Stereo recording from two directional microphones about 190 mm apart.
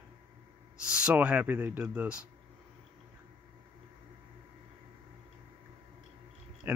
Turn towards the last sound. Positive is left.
turn(degrees=-10)  # may be behind; listen again after turning